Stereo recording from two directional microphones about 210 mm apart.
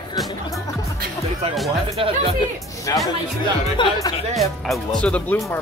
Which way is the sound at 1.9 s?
25° right (ahead or behind).